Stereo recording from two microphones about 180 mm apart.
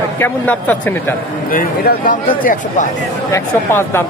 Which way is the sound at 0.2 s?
10° left (ahead or behind).